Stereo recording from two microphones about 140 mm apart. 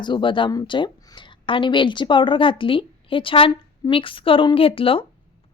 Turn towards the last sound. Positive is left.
turn(degrees=40)  # may be behind; listen again after turning